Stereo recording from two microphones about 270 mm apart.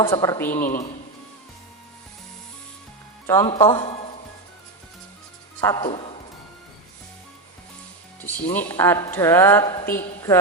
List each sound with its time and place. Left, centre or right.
0.0 s a woman's voice: centre
0.6 s speech: left
3.2 s speech: centre
5.5 s a woman's voice: centre
8.5 s a woman's voice: centre